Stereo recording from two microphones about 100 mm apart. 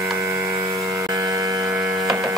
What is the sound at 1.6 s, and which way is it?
Hum, 10° right (ahead or behind).